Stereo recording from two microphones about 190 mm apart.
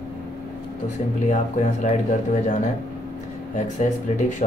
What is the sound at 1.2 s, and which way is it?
Speech, 40° left (ahead or behind).